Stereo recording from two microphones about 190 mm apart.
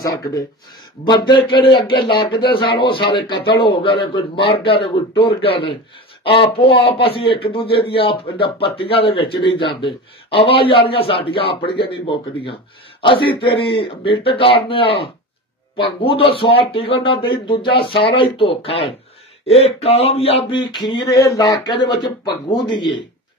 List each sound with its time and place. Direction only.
0.0 s speech: 20° left (ahead or behind)
19.4 s a sound: 30° left (ahead or behind)
21.1 s speech: 20° left (ahead or behind)